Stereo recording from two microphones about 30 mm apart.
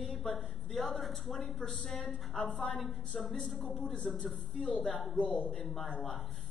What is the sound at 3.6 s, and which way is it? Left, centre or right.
Speech, left.